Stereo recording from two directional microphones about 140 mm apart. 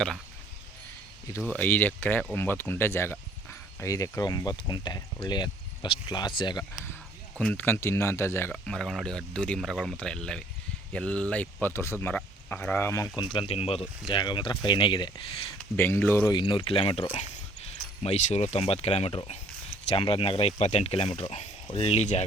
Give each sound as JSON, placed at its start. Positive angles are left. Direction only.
{"t": 1.5, "sound": "speech", "side_deg": 15}
{"t": 7.3, "sound": "speech", "side_deg": 10}
{"t": 8.5, "sound": "speech", "side_deg": 5}
{"t": 13.1, "sound": "speech", "side_deg": 30}
{"t": 13.5, "sound": "speech", "side_deg": 45}
{"t": 14.1, "sound": "speech", "side_deg": 35}
{"t": 15.7, "sound": "speech", "side_deg": 15}
{"t": 16.3, "sound": "speech", "side_deg": 35}